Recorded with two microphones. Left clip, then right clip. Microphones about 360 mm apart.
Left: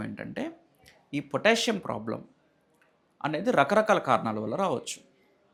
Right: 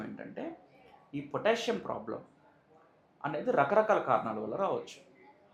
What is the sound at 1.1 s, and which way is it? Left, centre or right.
Speech, left.